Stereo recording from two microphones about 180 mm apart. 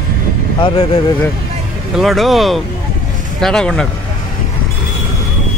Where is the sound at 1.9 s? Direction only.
Centre (ahead or behind).